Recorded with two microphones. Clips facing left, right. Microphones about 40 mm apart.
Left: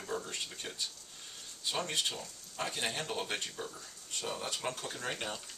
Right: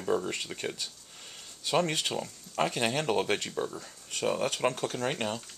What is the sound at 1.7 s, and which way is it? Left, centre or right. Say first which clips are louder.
Speech: right 8 dB; right.